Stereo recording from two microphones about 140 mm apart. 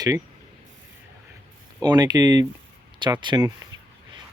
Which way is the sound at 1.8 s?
30° right (ahead or behind).